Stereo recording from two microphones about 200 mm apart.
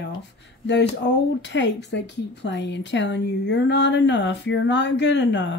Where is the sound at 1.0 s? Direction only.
60° left (ahead or behind).